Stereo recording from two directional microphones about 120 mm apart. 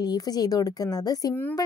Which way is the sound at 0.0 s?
35° left (ahead or behind).